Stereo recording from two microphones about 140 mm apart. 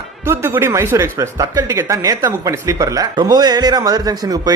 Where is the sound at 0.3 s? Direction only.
15° right (ahead or behind).